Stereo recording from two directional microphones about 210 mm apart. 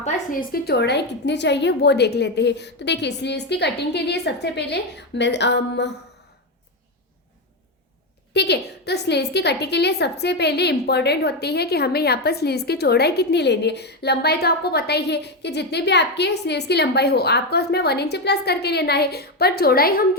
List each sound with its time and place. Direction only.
0.0 s a woman's voice: 40° left (ahead or behind)
8.3 s a woman's voice: 50° left (ahead or behind)